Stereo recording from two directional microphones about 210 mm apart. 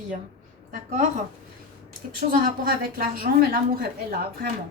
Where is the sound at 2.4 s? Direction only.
40° right (ahead or behind).